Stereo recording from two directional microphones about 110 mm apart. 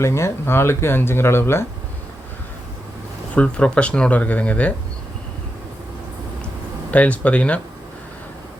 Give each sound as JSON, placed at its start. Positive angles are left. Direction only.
{"t": 0.0, "sound": "speech", "side_deg": 25}
{"t": 3.3, "sound": "speech", "side_deg": 10}
{"t": 6.9, "sound": "speech", "side_deg": 15}